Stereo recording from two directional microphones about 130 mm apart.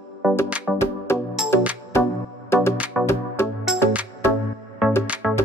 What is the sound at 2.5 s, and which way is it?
Music, 20° left (ahead or behind).